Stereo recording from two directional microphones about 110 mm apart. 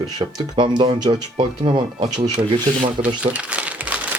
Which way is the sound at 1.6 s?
55° right (ahead or behind).